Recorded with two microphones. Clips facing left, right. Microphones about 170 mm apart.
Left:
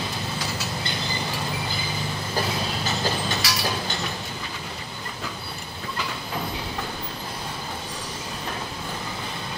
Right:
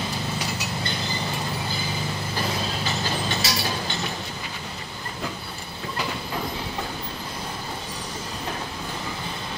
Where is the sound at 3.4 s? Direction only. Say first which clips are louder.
Right 1 dB; 25° right (ahead or behind).